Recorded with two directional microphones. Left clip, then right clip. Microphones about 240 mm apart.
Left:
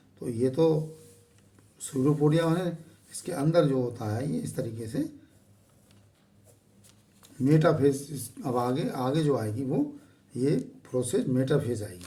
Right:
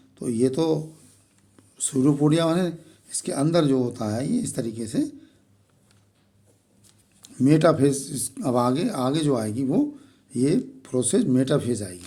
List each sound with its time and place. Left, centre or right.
0.2 s speech: right
1.8 s speech: right
7.4 s speech: right